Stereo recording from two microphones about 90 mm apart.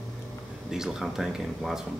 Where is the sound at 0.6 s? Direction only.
5° right (ahead or behind).